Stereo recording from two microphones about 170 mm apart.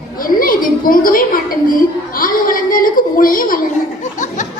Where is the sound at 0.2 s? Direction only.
55° left (ahead or behind).